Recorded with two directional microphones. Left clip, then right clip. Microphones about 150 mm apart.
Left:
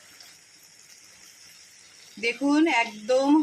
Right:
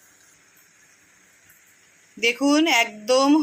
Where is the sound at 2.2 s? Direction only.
35° right (ahead or behind).